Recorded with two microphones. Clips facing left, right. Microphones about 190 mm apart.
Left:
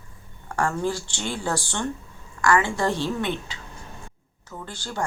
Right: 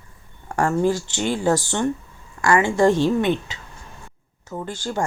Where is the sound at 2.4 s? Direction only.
25° right (ahead or behind).